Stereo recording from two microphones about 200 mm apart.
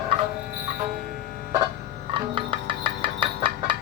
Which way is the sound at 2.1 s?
25° right (ahead or behind).